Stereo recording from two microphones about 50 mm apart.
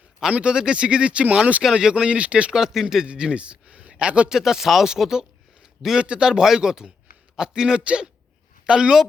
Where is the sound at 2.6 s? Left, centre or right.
Centre.